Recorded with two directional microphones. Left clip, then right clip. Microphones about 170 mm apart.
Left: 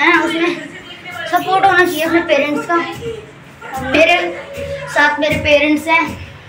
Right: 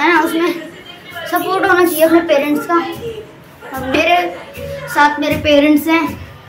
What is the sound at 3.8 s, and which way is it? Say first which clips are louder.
A woman's voice: left 1 dB; 25° right (ahead or behind).